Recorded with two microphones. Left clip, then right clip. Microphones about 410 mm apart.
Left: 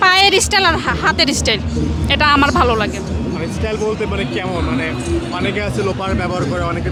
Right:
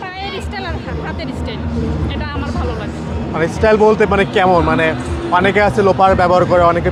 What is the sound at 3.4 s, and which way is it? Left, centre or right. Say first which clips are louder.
Speech: right 11 dB; right.